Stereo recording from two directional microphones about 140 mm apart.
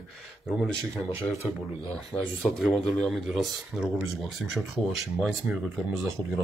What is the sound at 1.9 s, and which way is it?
Speech, 10° left (ahead or behind).